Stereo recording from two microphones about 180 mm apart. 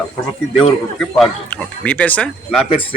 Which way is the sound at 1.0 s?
5° left (ahead or behind).